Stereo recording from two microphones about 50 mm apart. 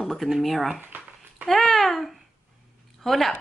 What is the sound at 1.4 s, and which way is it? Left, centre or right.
Speech, centre.